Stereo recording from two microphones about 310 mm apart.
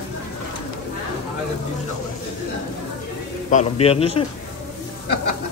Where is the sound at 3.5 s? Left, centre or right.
Left.